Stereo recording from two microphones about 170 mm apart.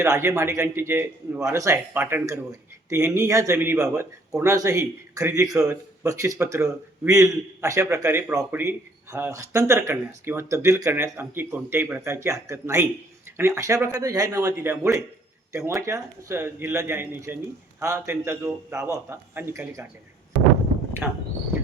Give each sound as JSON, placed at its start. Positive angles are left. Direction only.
{"t": 0.0, "sound": "a man's voice", "side_deg": -15}